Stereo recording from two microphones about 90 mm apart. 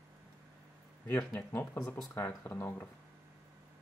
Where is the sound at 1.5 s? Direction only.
25° left (ahead or behind).